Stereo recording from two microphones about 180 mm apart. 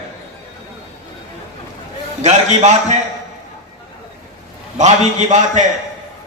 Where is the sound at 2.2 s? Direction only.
40° right (ahead or behind).